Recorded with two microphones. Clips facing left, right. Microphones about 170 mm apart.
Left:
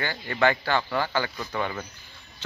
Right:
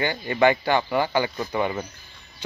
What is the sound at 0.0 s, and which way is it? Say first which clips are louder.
Speech: right 4 dB; 20° right (ahead or behind).